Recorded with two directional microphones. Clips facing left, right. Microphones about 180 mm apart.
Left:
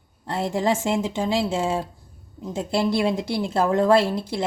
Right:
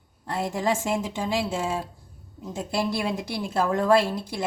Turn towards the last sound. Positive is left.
turn(degrees=25)  # may be behind; listen again after turning